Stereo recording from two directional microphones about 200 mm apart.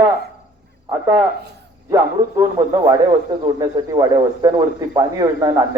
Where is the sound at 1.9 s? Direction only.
15° right (ahead or behind).